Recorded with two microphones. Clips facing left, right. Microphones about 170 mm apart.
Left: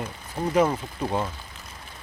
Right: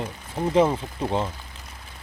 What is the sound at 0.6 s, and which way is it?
Speech, 10° right (ahead or behind).